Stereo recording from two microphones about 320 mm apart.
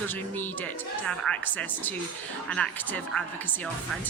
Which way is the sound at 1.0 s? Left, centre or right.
Centre.